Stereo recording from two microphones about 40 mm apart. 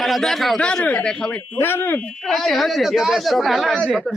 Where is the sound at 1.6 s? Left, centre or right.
Left.